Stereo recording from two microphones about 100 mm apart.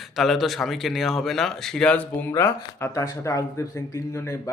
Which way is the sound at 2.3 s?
30° left (ahead or behind).